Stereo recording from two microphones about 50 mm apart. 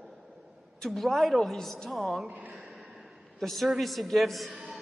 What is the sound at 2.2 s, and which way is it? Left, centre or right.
Speech, right.